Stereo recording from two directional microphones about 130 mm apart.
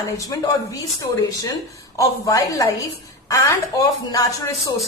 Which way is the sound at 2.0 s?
25° left (ahead or behind).